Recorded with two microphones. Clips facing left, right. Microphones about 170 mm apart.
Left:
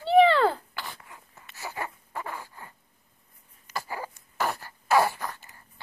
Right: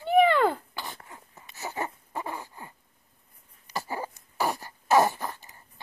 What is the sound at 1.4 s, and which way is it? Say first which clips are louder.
Wail: right 2 dB; 20° right (ahead or behind).